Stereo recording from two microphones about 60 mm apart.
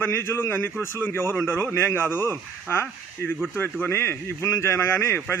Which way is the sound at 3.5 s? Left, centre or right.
Left.